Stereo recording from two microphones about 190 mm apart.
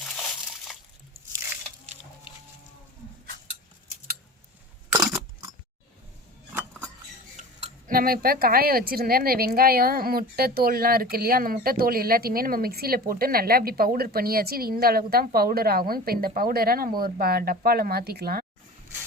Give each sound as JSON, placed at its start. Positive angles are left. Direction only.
{"t": 0.0, "sound": "crushing", "side_deg": 5}
{"t": 5.1, "sound": "a sound", "side_deg": -20}
{"t": 7.3, "sound": "speech", "side_deg": -45}